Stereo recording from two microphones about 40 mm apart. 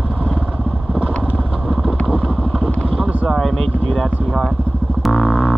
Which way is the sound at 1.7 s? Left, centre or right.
Centre.